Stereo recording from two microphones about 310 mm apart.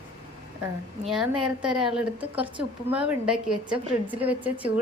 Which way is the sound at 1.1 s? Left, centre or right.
Centre.